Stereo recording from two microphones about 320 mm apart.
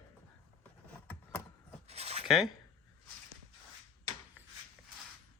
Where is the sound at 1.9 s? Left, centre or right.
Centre.